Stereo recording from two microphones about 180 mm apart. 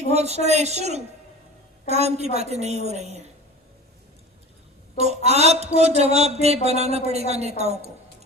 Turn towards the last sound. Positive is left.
turn(degrees=-35)  # may be behind; listen again after turning